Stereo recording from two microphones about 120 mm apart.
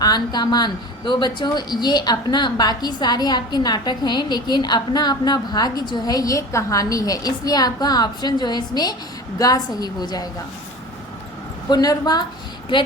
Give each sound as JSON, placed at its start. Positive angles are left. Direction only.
{"t": 0.0, "sound": "a woman's voice", "side_deg": 35}
{"t": 11.7, "sound": "a woman's voice", "side_deg": 35}